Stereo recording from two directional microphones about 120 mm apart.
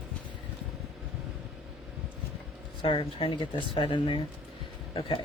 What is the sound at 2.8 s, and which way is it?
Speech, 45° left (ahead or behind).